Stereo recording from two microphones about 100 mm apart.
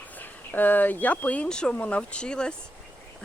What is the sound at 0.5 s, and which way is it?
Speech, 20° left (ahead or behind).